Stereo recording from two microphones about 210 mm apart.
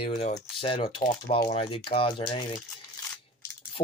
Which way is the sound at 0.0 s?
25° left (ahead or behind).